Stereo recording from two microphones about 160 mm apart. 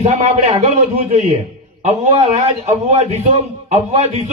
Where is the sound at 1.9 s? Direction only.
40° right (ahead or behind).